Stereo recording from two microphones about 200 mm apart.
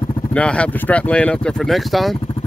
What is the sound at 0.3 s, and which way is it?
Speech, 5° left (ahead or behind).